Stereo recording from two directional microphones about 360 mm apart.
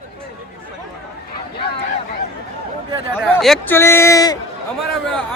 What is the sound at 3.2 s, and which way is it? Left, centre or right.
Speech, centre.